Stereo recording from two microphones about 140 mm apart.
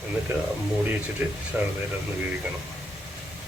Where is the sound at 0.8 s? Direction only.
15° right (ahead or behind).